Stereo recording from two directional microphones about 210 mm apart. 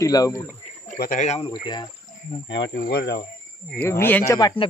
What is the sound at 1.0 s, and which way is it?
Speech, 40° left (ahead or behind).